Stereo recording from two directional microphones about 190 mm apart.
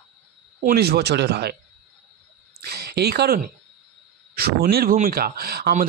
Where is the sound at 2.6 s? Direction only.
55° right (ahead or behind).